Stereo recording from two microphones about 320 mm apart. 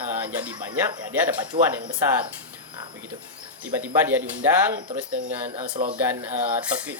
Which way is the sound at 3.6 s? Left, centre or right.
Centre.